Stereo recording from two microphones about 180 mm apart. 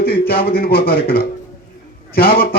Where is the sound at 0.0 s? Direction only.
60° left (ahead or behind).